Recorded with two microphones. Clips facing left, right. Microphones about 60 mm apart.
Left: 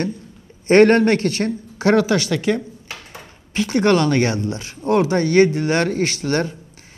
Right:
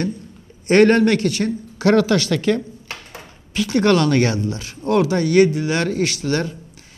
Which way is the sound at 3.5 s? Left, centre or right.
Left.